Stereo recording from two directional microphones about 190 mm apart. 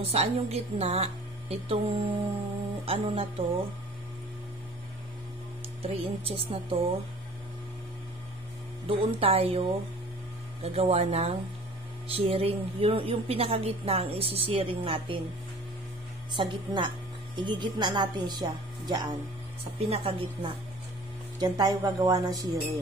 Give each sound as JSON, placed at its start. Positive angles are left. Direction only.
{"t": 0.0, "sound": "a woman's voice", "side_deg": -30}
{"t": 5.8, "sound": "a woman's voice", "side_deg": -30}
{"t": 8.8, "sound": "a woman's voice", "side_deg": -30}
{"t": 16.3, "sound": "speech", "side_deg": -25}